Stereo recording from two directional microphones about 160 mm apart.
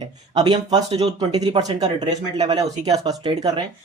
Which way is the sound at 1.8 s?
45° right (ahead or behind).